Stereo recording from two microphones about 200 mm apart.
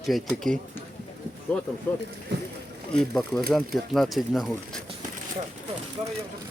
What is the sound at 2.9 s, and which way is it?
A man's voice, centre (ahead or behind).